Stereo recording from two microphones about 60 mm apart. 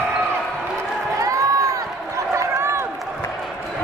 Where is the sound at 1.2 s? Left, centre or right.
Right.